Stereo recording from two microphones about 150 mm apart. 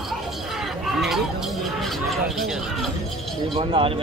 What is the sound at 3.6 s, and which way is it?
Speech, 35° right (ahead or behind).